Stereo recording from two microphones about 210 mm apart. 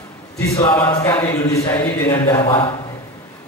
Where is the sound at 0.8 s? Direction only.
10° left (ahead or behind).